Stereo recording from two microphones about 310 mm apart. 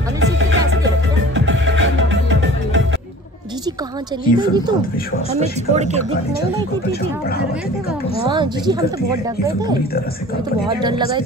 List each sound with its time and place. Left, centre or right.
0.2 s music: right
4.4 s speech: centre
6.9 s speech: left
8.3 s speech: centre
10.8 s speech: centre